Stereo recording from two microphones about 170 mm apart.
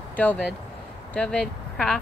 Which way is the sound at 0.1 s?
10° left (ahead or behind).